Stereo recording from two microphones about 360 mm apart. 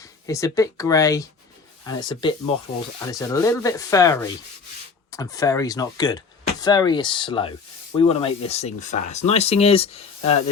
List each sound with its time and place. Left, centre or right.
0.0 s speech: centre